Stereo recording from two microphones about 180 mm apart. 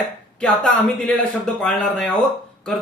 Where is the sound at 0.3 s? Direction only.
5° left (ahead or behind).